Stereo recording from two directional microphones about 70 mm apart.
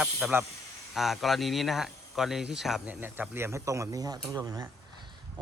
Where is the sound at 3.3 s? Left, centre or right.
Right.